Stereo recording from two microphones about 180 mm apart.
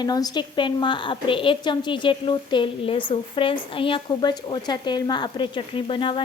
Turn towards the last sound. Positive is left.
turn(degrees=30)  # may be behind; listen again after turning